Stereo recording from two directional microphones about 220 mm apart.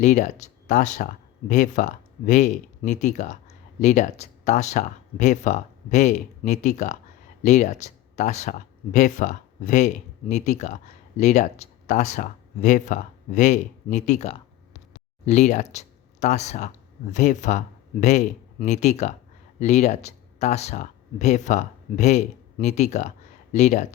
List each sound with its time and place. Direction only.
0.0 s speech: 35° left (ahead or behind)